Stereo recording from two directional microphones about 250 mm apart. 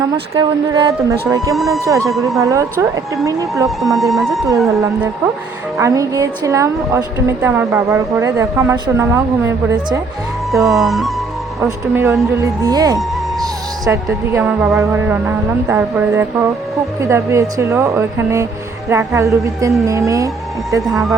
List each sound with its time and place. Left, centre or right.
0.3 s a woman's voice: centre
1.5 s speech: centre
1.8 s a woman's voice: centre
2.0 s speech: centre
2.4 s a woman's voice: centre
3.8 s speech: centre
5.7 s a woman's voice: centre
20.9 s speech: centre